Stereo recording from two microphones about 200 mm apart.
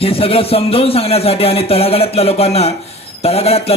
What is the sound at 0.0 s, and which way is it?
Speech, 30° left (ahead or behind).